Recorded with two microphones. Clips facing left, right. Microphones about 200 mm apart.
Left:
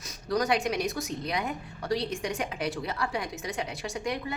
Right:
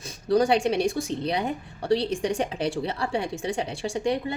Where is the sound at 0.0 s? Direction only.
30° right (ahead or behind).